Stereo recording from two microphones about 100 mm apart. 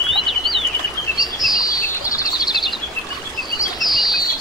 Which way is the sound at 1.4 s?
35° left (ahead or behind).